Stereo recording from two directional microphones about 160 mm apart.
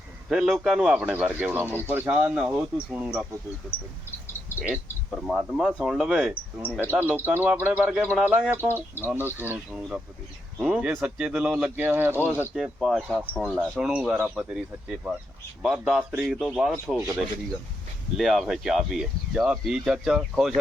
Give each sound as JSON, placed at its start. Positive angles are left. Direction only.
{"t": 0.3, "sound": "speech", "side_deg": -5}
{"t": 4.3, "sound": "a sound", "side_deg": 15}
{"t": 5.2, "sound": "speech", "side_deg": 0}
{"t": 18.2, "sound": "speech", "side_deg": 0}